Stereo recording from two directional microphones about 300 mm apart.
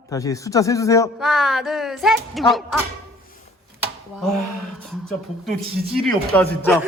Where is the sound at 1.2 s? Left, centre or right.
Centre.